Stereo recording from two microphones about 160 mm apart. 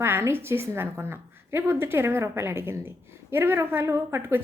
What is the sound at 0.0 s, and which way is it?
A woman's voice, 15° right (ahead or behind).